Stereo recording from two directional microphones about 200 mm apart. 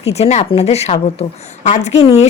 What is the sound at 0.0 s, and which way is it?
Speech, 30° left (ahead or behind).